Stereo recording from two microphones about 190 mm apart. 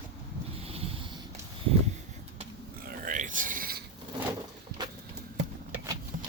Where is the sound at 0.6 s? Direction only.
30° right (ahead or behind).